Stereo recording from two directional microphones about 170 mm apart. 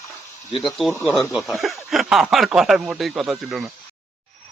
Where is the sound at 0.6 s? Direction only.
Centre (ahead or behind).